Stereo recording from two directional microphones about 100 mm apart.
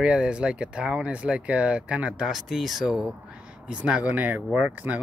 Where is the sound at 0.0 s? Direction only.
10° right (ahead or behind).